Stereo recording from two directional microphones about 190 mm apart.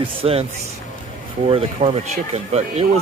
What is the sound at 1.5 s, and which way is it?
Speech, 30° right (ahead or behind).